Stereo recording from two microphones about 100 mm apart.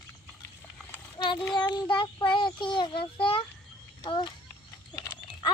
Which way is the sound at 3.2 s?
65° left (ahead or behind).